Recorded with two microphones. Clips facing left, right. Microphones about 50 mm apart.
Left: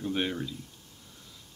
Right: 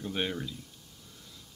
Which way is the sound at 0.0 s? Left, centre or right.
Centre.